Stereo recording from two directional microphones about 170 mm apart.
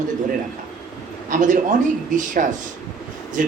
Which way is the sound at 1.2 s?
50° right (ahead or behind).